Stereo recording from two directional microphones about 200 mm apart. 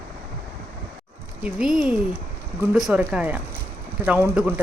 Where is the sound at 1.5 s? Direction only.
5° right (ahead or behind).